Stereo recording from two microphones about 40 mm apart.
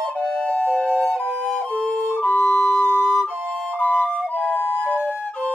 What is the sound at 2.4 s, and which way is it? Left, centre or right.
Flute, left.